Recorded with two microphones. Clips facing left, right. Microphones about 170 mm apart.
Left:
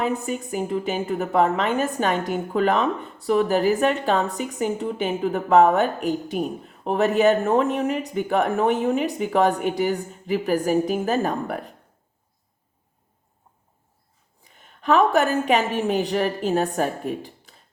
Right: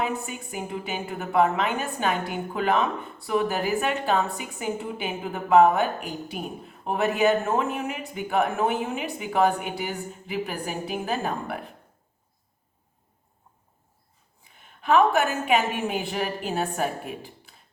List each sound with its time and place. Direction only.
0.0 s a woman's voice: 40° left (ahead or behind)
14.4 s a woman's voice: 40° left (ahead or behind)